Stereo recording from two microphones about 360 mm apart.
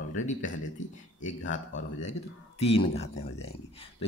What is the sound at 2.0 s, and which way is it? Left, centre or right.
Speech, centre.